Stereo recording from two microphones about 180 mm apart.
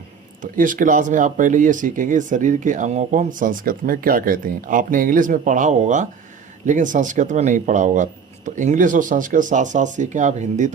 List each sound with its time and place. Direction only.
0.5 s speech: 50° right (ahead or behind)